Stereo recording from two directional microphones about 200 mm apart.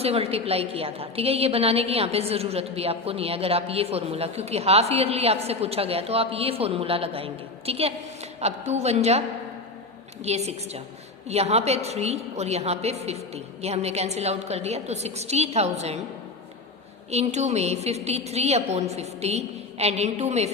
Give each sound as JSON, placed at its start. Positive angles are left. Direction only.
{"t": 0.0, "sound": "a woman's voice", "side_deg": -30}
{"t": 10.2, "sound": "a woman's voice", "side_deg": -30}
{"t": 17.1, "sound": "a woman's voice", "side_deg": -35}